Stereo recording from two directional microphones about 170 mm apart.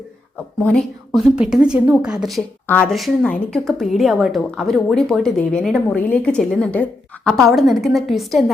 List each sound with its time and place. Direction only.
0.6 s a woman's voice: 5° left (ahead or behind)